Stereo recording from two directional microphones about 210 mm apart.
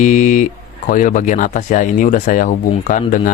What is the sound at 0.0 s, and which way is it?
Speech, 35° left (ahead or behind).